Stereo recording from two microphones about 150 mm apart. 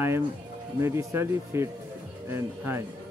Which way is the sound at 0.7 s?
15° right (ahead or behind).